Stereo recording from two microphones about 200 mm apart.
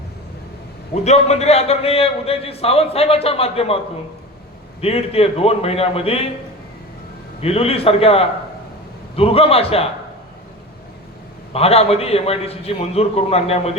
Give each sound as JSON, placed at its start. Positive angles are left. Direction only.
{"t": 1.0, "sound": "speech", "side_deg": 35}
{"t": 4.8, "sound": "speech", "side_deg": 30}
{"t": 7.4, "sound": "speech", "side_deg": 30}
{"t": 11.5, "sound": "a man's voice", "side_deg": 30}